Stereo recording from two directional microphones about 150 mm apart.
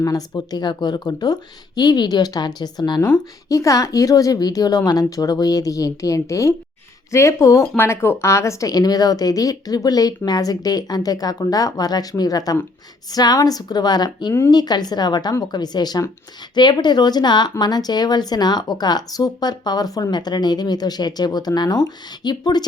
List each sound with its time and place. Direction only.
0.0 s speech: 25° left (ahead or behind)